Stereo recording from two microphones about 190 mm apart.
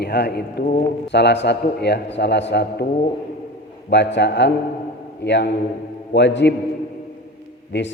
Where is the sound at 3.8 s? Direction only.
65° left (ahead or behind).